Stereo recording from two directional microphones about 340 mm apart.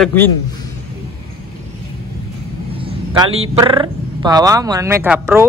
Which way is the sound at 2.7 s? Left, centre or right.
Centre.